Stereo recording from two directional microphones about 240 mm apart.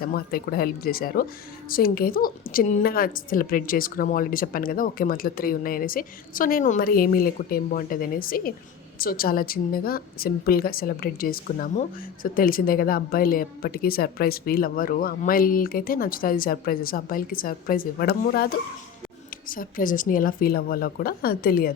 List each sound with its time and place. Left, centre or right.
0.0 s a woman's voice: left